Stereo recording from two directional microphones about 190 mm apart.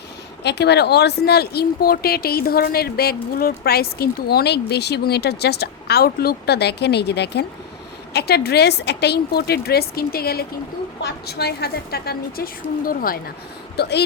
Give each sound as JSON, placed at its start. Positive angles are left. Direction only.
{"t": 0.4, "sound": "speech", "side_deg": 60}
{"t": 13.7, "sound": "speech", "side_deg": 60}